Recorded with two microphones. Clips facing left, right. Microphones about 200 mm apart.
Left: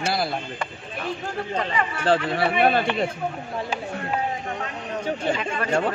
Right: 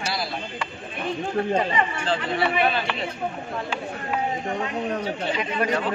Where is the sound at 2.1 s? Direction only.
55° left (ahead or behind).